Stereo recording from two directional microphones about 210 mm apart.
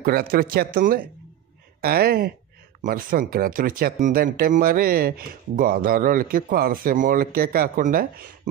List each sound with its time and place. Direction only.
0.0 s speech: 45° right (ahead or behind)